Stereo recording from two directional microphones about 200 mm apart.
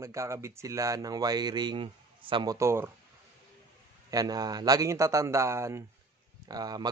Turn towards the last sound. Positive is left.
turn(degrees=-20)  # may be behind; listen again after turning